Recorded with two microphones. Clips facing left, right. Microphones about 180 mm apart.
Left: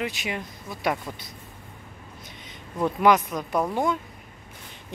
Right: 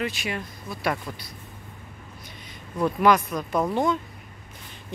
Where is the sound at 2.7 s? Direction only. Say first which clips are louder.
Even; 15° left (ahead or behind).